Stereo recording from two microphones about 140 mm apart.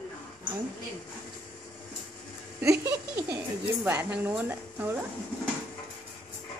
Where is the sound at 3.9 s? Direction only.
10° right (ahead or behind).